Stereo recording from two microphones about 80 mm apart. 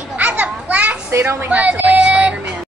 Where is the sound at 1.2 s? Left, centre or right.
Right.